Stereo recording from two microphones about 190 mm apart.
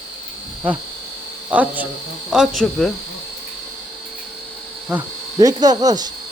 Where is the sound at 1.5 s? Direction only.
10° right (ahead or behind).